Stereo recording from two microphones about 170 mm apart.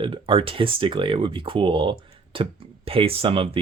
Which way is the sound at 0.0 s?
30° right (ahead or behind).